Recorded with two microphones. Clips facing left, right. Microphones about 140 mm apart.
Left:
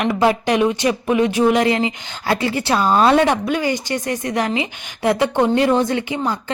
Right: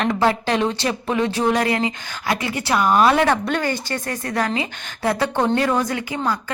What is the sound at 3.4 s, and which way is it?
A woman's voice, 10° left (ahead or behind).